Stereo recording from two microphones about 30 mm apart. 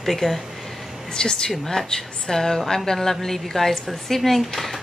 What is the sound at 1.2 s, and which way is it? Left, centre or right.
A woman's voice, left.